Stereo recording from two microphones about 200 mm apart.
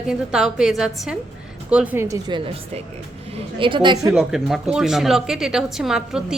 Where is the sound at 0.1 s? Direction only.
5° right (ahead or behind); by 4.1 s 25° right (ahead or behind).